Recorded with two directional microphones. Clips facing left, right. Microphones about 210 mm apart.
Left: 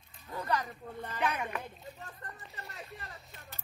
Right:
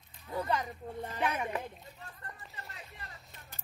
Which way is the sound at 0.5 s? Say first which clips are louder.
Left 4 dB; 20° right (ahead or behind).